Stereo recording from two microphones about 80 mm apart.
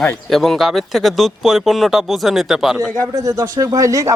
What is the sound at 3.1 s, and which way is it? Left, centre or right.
Speech, right.